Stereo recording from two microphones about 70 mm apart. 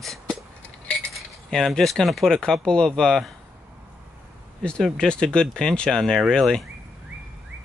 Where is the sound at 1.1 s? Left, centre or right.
Centre.